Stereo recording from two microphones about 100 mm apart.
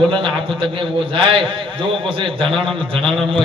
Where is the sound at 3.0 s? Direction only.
Centre (ahead or behind).